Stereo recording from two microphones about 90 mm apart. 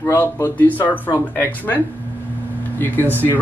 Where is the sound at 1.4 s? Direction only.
20° left (ahead or behind).